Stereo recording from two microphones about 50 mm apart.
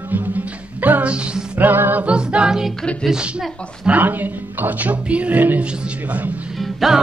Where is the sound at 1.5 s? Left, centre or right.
Right.